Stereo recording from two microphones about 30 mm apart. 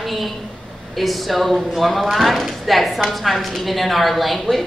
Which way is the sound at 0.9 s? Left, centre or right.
Centre.